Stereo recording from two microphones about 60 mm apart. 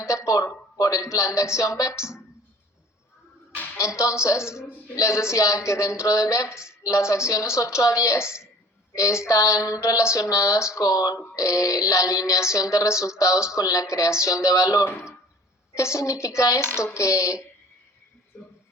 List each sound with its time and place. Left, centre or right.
0.0 s speech: left
3.8 s speech: left
10.8 s speech: left
11.3 s speech: left
16.6 s speech: left